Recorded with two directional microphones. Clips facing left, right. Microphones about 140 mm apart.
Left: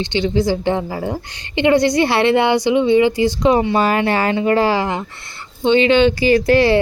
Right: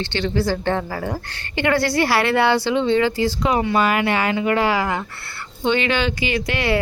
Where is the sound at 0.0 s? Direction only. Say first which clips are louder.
Left 4 dB; 15° left (ahead or behind).